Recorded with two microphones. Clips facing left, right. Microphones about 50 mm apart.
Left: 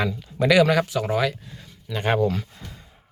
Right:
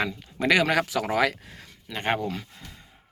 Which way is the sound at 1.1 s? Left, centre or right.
Right.